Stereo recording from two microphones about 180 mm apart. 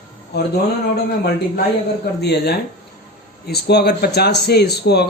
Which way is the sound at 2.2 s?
60° left (ahead or behind).